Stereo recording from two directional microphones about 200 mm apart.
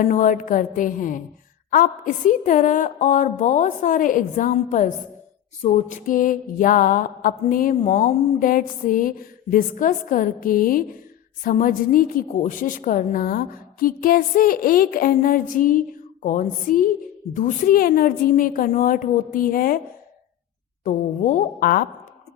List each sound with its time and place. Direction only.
0.0 s a woman's voice: 40° left (ahead or behind)
20.8 s a woman's voice: 40° left (ahead or behind)